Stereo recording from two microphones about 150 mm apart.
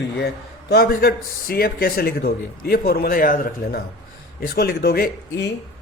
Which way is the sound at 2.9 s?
80° left.